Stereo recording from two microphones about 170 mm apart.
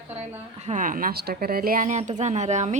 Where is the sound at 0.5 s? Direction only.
45° right (ahead or behind).